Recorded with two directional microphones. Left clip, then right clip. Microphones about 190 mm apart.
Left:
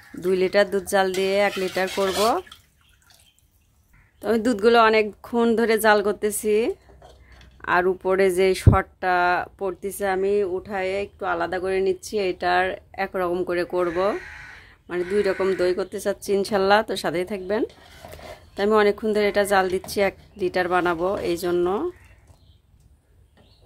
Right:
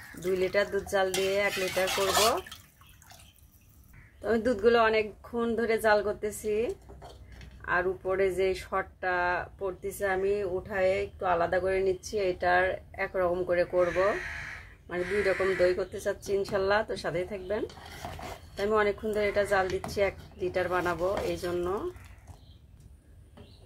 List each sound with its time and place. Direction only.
0.2 s speech: 65° left (ahead or behind)
4.2 s speech: 55° left (ahead or behind)